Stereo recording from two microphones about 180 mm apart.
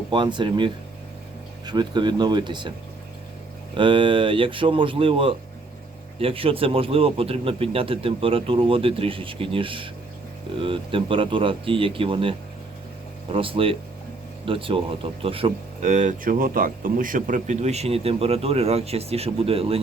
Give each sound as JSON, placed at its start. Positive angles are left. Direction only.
{"t": 0.1, "sound": "speech", "side_deg": -25}
{"t": 3.8, "sound": "speech", "side_deg": -30}